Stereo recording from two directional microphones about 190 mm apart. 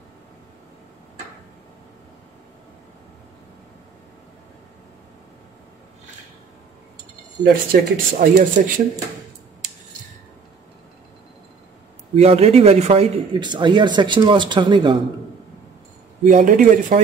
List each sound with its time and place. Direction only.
7.4 s speech: 50° right (ahead or behind)
12.2 s speech: 35° right (ahead or behind)
16.3 s a man's voice: 45° right (ahead or behind)